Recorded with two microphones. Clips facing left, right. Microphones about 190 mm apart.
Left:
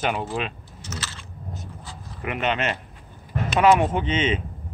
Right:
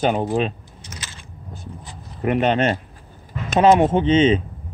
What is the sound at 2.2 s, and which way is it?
Speech, 35° right (ahead or behind).